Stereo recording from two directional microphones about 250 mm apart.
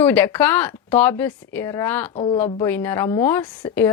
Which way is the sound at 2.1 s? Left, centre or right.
Left.